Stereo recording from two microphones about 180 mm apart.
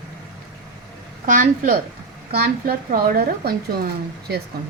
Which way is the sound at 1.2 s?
45° right (ahead or behind).